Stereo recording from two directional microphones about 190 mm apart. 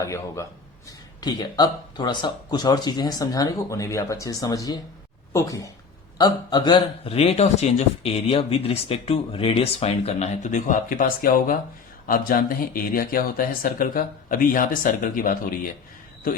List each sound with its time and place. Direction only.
0.0 s a man's voice: 15° left (ahead or behind); by 15.7 s 45° left (ahead or behind)